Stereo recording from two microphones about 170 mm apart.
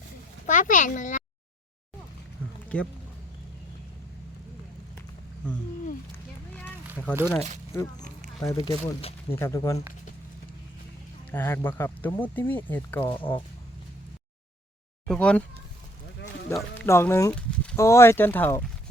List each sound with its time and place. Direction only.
0.4 s speech: 50° left (ahead or behind)
2.7 s speech: 10° left (ahead or behind)
7.0 s speech: 15° left (ahead or behind)
9.3 s speech: 15° left (ahead or behind)
11.3 s speech: 10° left (ahead or behind)
13.1 s speech: 30° left (ahead or behind)
15.0 s speech: 5° left (ahead or behind)
16.5 s speech: 15° left (ahead or behind)
17.3 s a sound: 5° left (ahead or behind)
17.7 s speech: 15° left (ahead or behind)